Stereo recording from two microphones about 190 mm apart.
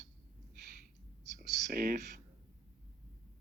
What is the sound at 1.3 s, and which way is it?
Speech, 50° right (ahead or behind).